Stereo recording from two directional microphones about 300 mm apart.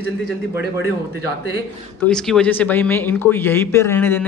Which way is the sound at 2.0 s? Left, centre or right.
Centre.